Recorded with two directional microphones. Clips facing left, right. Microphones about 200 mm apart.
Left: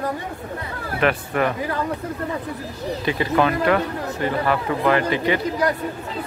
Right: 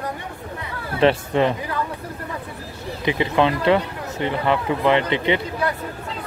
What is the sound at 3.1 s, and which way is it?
Speech, 20° right (ahead or behind).